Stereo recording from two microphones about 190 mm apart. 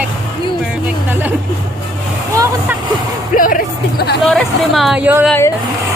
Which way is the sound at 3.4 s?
45° left (ahead or behind).